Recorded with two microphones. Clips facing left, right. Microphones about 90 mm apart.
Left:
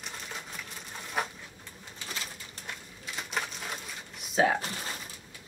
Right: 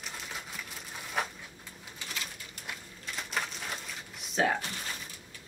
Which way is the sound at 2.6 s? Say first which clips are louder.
Right 1 dB; centre (ahead or behind).